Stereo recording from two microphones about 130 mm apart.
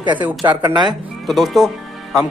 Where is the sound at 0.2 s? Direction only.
35° right (ahead or behind).